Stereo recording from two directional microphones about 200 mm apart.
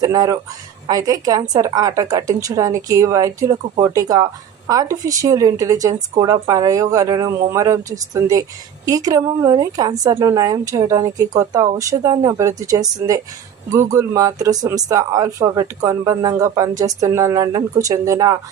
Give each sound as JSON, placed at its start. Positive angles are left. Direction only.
{"t": 0.0, "sound": "a woman's voice", "side_deg": -15}